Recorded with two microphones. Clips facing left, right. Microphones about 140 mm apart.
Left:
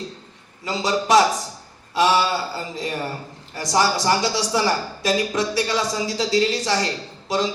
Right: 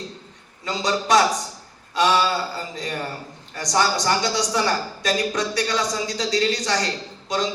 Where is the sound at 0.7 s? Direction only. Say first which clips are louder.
Left 2 dB; 25° left (ahead or behind).